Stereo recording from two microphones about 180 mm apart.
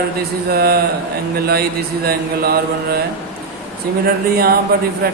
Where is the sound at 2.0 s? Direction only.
60° right (ahead or behind).